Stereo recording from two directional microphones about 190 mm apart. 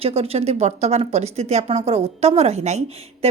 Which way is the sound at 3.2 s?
35° right (ahead or behind).